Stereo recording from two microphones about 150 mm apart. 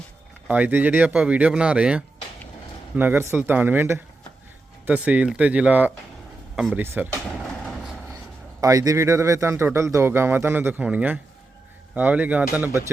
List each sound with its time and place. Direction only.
0.4 s speech: 10° right (ahead or behind)
8.6 s speech: 20° right (ahead or behind)